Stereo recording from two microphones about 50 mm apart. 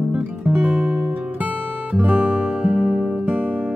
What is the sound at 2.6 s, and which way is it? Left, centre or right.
Music, centre.